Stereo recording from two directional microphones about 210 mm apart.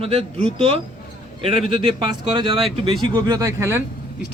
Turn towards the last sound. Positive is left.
turn(degrees=-10)  # may be behind; listen again after turning